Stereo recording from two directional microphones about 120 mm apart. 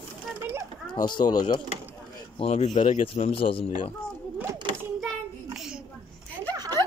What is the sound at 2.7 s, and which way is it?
Speech, 45° left (ahead or behind).